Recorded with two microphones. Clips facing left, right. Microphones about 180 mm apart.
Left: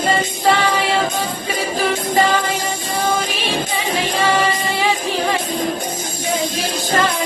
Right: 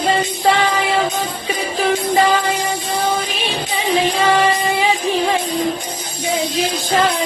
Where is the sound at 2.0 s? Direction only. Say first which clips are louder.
Right 1 dB; 45° left (ahead or behind).